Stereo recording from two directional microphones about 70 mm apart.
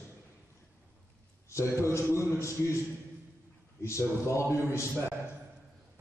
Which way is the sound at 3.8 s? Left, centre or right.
Left.